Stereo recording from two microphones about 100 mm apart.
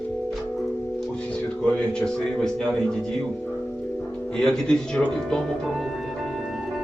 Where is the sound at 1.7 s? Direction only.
5° left (ahead or behind).